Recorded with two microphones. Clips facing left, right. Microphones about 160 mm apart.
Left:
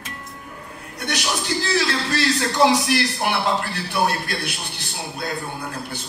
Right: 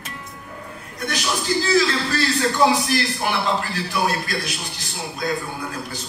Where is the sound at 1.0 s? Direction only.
70° left (ahead or behind).